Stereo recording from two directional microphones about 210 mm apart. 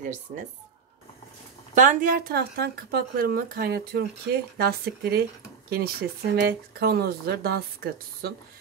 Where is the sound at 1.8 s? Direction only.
40° right (ahead or behind).